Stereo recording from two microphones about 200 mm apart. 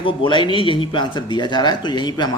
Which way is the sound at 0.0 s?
25° left (ahead or behind).